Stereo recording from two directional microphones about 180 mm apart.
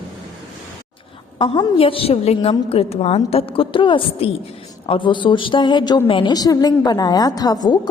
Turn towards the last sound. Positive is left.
turn(degrees=20)  # may be behind; listen again after turning